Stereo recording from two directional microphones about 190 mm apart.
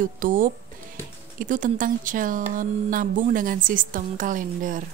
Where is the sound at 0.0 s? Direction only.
45° right (ahead or behind).